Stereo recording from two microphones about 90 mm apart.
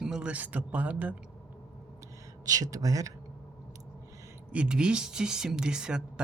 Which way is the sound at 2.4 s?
40° right (ahead or behind).